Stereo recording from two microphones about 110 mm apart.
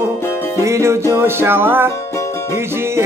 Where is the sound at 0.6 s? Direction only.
25° right (ahead or behind).